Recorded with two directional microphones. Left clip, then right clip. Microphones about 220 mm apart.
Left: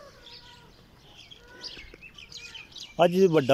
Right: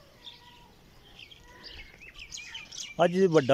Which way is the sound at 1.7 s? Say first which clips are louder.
Left 5 dB; 55° left (ahead or behind).